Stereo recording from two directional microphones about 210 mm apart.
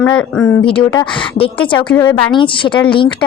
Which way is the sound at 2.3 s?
25° left (ahead or behind).